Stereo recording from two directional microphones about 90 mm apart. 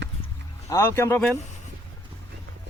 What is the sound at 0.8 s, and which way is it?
Speech, 25° left (ahead or behind).